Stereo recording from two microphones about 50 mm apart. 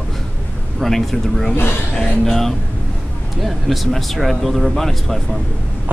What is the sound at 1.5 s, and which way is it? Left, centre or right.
Speech, left.